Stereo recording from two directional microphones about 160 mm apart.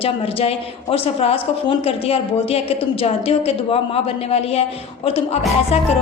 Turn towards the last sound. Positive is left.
turn(degrees=40)  # may be behind; listen again after turning